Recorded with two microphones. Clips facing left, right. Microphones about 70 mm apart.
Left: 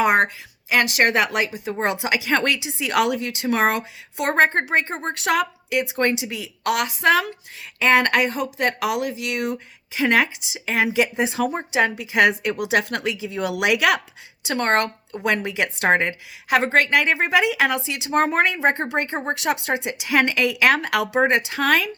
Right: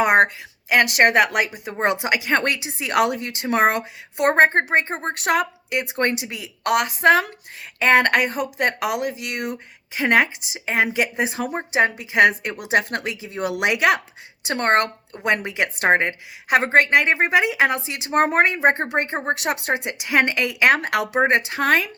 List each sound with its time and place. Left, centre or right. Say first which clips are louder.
0.0 s a sound: right 2 dB; right
0.7 s speech: right 2 dB; right
4.3 s a woman's voice: right 2 dB; right
5.2 s a woman's voice: even; right